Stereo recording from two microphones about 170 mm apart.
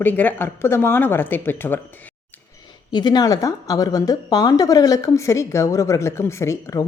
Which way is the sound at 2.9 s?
25° left (ahead or behind).